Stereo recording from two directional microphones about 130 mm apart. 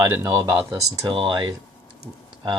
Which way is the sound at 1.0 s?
40° right (ahead or behind).